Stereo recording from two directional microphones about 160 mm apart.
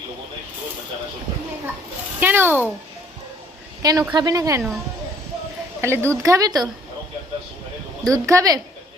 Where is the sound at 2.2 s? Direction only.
15° right (ahead or behind).